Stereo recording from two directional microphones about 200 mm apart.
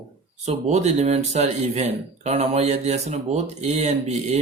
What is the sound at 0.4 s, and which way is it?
Speech, 35° right (ahead or behind).